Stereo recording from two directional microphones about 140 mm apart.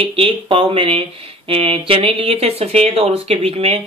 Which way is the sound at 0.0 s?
40° right (ahead or behind).